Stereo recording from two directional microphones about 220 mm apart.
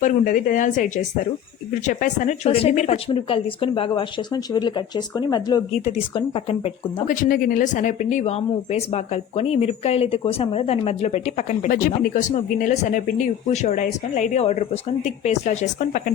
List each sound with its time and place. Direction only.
0.0 s speech: 40° left (ahead or behind)
1.9 s speech: 35° left (ahead or behind)
7.2 s speech: 40° left (ahead or behind)